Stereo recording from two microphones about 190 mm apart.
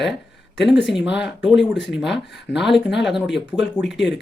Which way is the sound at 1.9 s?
Centre (ahead or behind).